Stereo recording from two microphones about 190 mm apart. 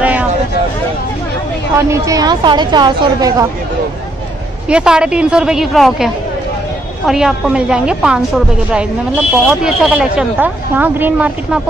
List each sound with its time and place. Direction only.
0.0 s vehicle: 10° right (ahead or behind)
1.8 s a woman's voice: 15° right (ahead or behind)
4.6 s a woman's voice: 5° right (ahead or behind)
7.1 s a woman's voice: centre (ahead or behind)
9.5 s a woman's voice: 5° right (ahead or behind)